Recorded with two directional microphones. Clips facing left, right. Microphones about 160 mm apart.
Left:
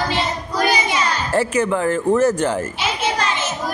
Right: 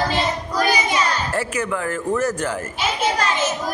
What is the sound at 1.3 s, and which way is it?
Speech, 30° left (ahead or behind).